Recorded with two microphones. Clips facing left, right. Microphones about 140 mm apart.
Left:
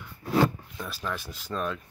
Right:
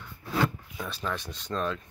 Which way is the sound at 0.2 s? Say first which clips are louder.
Left 4 dB; 20° left (ahead or behind).